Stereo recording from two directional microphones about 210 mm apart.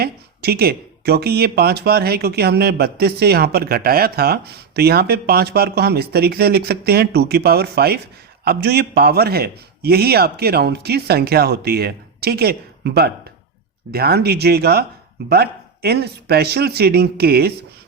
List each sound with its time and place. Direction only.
0.0 s speech: 50° right (ahead or behind)